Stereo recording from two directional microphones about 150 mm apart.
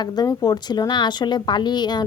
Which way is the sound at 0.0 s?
25° left (ahead or behind).